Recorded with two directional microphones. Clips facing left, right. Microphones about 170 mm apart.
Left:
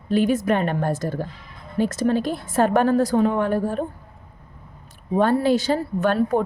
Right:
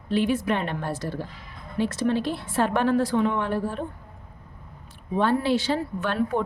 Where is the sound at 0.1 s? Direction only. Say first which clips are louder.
Left 4 dB; 45° left (ahead or behind).